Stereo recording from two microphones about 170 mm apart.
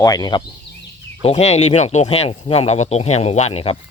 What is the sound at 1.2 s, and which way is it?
Speech, 40° left (ahead or behind).